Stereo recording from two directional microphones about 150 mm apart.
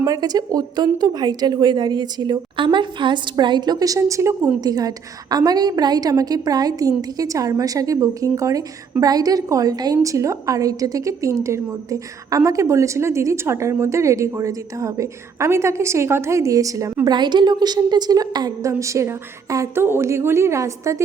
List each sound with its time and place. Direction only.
0.0 s a woman's voice: 25° right (ahead or behind)